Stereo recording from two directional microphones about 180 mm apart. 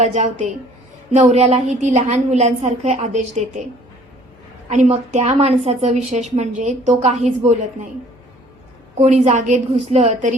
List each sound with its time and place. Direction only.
0.0 s a woman's voice: 40° right (ahead or behind)
4.7 s a woman's voice: 40° right (ahead or behind)
9.0 s a woman's voice: 40° right (ahead or behind)